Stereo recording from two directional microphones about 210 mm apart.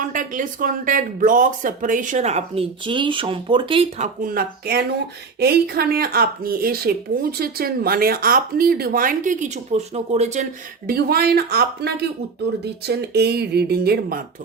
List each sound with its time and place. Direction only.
0.0 s speech: 40° right (ahead or behind)
10.8 s speech: 45° right (ahead or behind)